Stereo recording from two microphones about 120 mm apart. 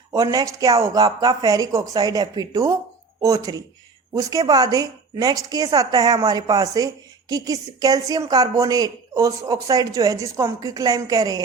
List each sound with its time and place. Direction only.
0.1 s speech: 30° right (ahead or behind)